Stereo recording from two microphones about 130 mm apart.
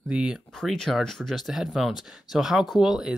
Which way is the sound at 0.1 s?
5° right (ahead or behind).